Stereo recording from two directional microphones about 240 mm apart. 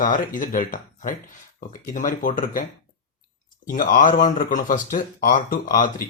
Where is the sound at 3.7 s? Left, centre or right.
Left.